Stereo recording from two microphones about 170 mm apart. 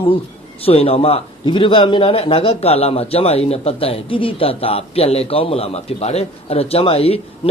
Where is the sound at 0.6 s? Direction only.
35° left (ahead or behind).